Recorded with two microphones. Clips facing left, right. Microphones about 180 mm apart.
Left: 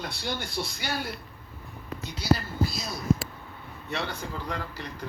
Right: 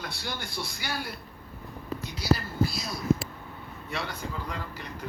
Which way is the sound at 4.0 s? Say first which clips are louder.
Left 1 dB; 70° left (ahead or behind).